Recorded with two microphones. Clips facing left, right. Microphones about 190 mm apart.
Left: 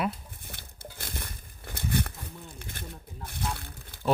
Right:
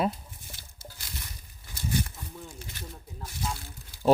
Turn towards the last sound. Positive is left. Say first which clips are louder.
# left 1 dB
turn(degrees=60)  # may be behind; listen again after turning